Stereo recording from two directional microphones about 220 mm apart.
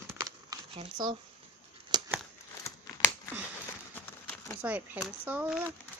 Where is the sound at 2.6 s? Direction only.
15° left (ahead or behind).